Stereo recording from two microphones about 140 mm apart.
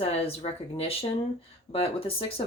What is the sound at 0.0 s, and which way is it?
Speech, 45° left (ahead or behind).